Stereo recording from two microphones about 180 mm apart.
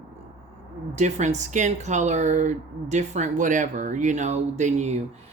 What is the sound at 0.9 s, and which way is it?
Speech, 40° right (ahead or behind).